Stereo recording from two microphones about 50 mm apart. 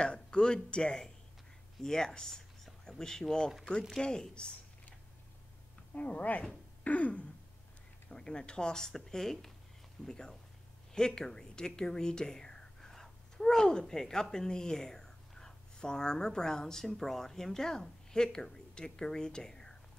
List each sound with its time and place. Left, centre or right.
0.0 s speech: centre
5.9 s speech: left
6.8 s throat clearing: left
8.1 s speech: centre